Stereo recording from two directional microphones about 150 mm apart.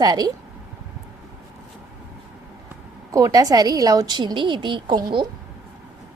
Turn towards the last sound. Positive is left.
turn(degrees=-30)  # may be behind; listen again after turning